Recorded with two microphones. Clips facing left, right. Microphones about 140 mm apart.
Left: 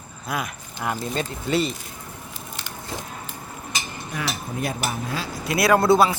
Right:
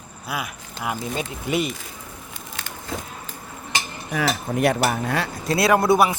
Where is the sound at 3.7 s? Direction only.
90° right; by 5.3 s 65° right (ahead or behind).